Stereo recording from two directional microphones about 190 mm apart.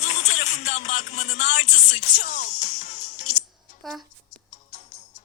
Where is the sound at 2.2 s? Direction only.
40° left (ahead or behind).